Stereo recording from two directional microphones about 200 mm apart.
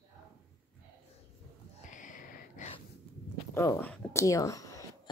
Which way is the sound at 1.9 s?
40° left (ahead or behind).